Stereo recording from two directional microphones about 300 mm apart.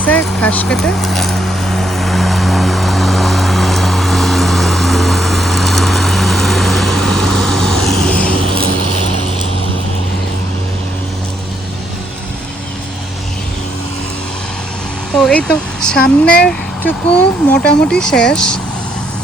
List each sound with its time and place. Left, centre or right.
0.0 s vehicle: centre
15.1 s speech: centre